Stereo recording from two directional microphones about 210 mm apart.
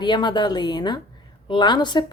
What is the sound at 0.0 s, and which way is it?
A woman's voice, 20° left (ahead or behind).